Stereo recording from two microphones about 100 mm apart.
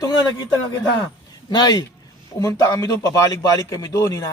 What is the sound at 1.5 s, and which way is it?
A man's voice, 45° left (ahead or behind).